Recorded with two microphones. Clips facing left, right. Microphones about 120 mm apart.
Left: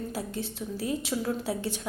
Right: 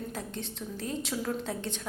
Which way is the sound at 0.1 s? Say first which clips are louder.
Left 4 dB; 5° left (ahead or behind).